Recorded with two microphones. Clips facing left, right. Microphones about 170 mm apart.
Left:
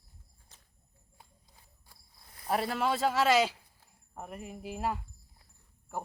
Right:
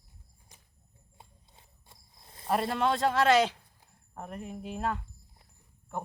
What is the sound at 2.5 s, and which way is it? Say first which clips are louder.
Speech: right 2 dB; 5° left (ahead or behind).